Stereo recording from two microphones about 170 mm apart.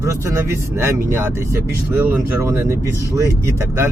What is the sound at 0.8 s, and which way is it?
Speech, 15° right (ahead or behind).